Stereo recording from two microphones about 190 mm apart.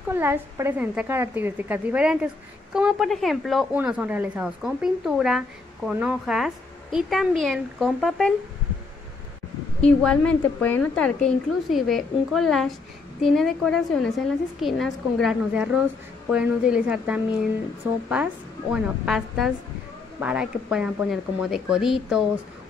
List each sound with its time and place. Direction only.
0.1 s a woman's voice: 10° right (ahead or behind)
9.8 s a woman's voice: 5° left (ahead or behind)